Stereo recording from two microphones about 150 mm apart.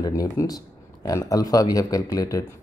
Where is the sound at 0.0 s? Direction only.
25° left (ahead or behind).